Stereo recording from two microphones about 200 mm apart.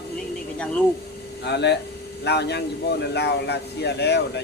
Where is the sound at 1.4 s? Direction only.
55° left (ahead or behind).